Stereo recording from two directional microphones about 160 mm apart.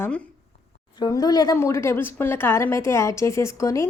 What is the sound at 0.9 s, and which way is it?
Speech, 25° left (ahead or behind).